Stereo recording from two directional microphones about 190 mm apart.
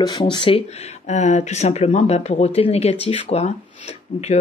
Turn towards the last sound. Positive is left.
turn(degrees=35)  # may be behind; listen again after turning